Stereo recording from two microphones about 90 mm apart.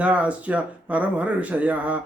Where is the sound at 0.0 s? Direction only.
15° right (ahead or behind).